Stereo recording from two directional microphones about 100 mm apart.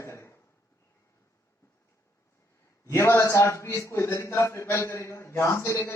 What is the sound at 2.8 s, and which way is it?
A man's voice, 30° left (ahead or behind).